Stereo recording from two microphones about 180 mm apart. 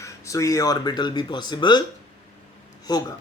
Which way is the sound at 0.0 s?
20° left (ahead or behind).